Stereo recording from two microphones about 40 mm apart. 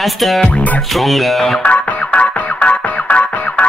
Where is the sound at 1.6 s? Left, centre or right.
Left.